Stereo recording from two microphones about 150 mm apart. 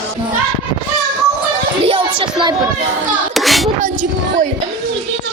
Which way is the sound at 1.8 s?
35° right (ahead or behind).